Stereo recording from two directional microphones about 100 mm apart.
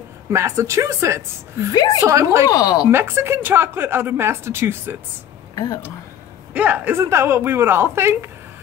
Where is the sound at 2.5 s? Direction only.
40° left (ahead or behind).